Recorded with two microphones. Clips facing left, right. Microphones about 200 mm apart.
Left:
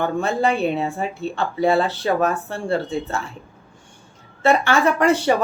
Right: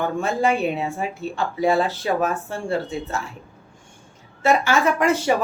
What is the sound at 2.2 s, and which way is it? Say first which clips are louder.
Speech: left 2 dB; 30° left (ahead or behind).